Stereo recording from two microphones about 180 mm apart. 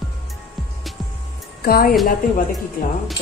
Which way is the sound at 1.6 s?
55° left (ahead or behind).